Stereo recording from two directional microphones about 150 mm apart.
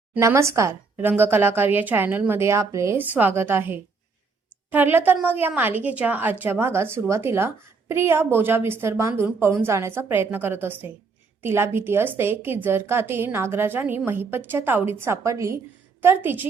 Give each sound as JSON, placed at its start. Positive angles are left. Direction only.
{"t": 0.1, "sound": "a woman's voice", "side_deg": -20}